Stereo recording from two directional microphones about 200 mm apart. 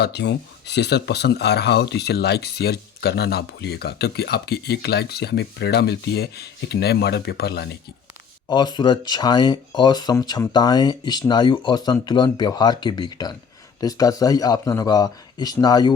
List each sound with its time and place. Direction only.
0.0 s speech: 60° left (ahead or behind)
8.4 s speech: 20° left (ahead or behind)